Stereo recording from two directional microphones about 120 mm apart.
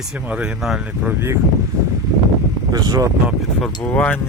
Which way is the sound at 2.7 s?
30° right (ahead or behind).